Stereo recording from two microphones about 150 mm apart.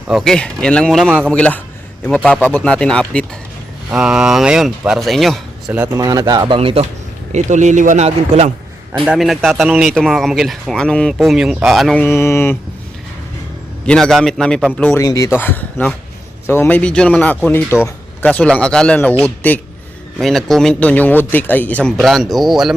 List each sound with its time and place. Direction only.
0.1 s a man's voice: centre (ahead or behind)
3.9 s speech: 5° right (ahead or behind)
5.8 s speech: 20° right (ahead or behind)
6.6 s speech: 40° right (ahead or behind)
7.3 s speech: 55° right (ahead or behind)
9.0 s speech: centre (ahead or behind)
12.0 s a man's voice: 15° left (ahead or behind)
13.8 s a man's voice: 5° left (ahead or behind)